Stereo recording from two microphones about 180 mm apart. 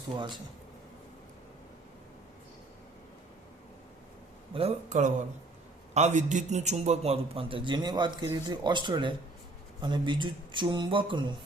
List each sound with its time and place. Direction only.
4.5 s a man's voice: 35° right (ahead or behind)